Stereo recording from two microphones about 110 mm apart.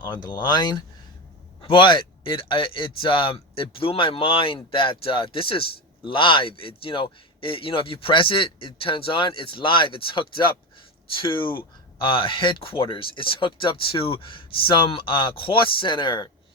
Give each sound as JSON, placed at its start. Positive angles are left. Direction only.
{"t": 0.0, "sound": "speech", "side_deg": 45}